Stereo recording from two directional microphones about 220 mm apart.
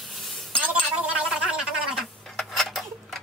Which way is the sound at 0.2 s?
Centre (ahead or behind).